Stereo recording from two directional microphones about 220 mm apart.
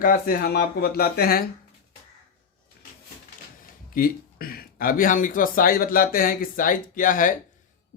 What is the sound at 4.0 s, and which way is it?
A man's voice, 40° left (ahead or behind).